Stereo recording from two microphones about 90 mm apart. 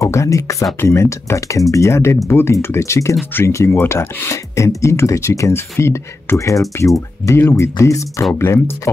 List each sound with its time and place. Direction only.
0.0 s speech: 35° left (ahead or behind)